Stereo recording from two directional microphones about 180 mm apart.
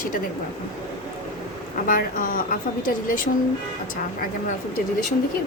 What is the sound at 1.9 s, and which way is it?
A woman's voice, 50° left (ahead or behind).